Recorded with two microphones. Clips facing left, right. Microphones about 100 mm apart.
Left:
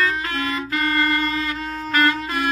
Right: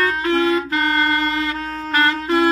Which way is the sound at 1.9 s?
25° right (ahead or behind).